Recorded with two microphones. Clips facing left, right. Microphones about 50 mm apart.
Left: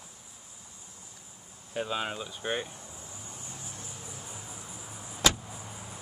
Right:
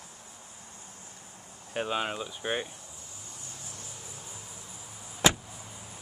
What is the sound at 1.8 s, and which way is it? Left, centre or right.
Speech, centre.